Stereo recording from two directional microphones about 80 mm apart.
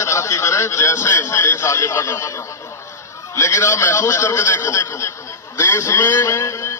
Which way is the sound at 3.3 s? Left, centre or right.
Left.